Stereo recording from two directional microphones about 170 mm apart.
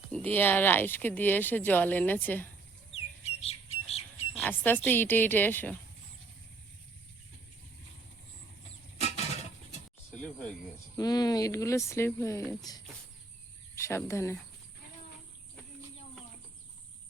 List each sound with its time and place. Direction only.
0.1 s speech: 10° left (ahead or behind)
2.9 s squawk: 35° left (ahead or behind)
4.4 s speech: 10° left (ahead or behind)
10.1 s cricket: 10° left (ahead or behind)
10.9 s speech: 20° left (ahead or behind)